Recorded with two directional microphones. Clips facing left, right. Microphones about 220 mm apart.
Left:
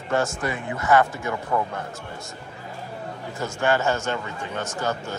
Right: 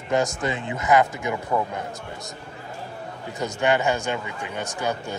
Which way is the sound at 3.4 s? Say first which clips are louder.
Right 1 dB; 15° right (ahead or behind).